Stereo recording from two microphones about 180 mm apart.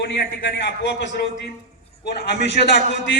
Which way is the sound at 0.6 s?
80° left.